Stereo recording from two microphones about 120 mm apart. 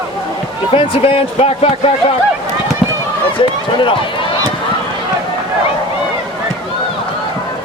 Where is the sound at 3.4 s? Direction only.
45° left (ahead or behind).